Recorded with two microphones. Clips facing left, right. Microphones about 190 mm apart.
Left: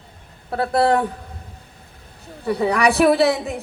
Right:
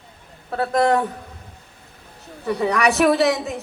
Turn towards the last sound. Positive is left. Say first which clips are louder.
# left 1 dB
turn(degrees=35)  # may be behind; listen again after turning